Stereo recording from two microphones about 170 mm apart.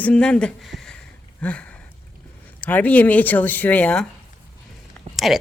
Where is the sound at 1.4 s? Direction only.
10° left (ahead or behind).